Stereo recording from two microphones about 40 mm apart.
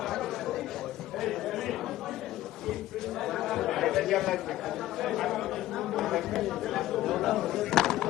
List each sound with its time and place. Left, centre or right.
0.1 s chatter: centre
3.2 s chatter: centre
4.9 s speech: centre